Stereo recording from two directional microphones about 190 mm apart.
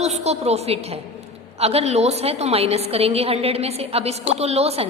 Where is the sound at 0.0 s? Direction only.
35° right (ahead or behind).